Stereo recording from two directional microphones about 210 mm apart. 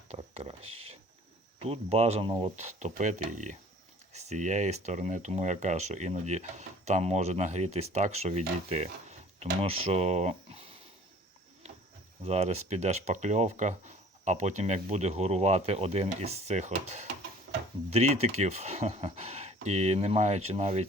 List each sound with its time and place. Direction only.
0.1 s speech: 30° right (ahead or behind)
12.2 s speech: 30° right (ahead or behind)